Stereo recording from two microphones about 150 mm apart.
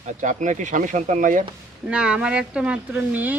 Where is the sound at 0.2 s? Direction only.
55° right (ahead or behind).